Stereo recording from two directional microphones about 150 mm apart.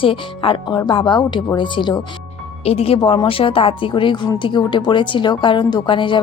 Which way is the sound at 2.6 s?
40° left (ahead or behind).